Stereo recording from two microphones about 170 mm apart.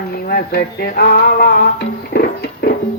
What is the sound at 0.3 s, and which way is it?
Music, 65° left (ahead or behind).